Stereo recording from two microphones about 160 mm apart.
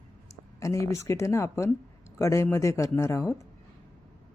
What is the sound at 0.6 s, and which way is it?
Speech, 20° left (ahead or behind).